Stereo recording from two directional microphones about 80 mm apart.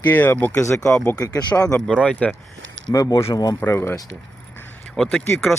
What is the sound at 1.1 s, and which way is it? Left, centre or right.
Speech, left.